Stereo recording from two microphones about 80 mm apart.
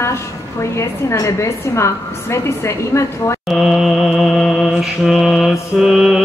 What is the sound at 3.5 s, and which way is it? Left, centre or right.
Mantra, centre.